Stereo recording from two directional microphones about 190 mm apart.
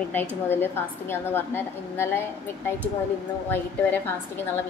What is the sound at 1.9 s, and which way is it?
Speech, 15° left (ahead or behind).